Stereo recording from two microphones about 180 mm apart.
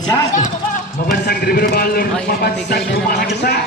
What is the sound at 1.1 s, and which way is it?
A man's voice, 55° left (ahead or behind).